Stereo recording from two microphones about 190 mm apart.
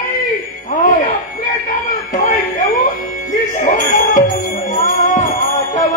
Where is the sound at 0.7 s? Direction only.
40° left (ahead or behind).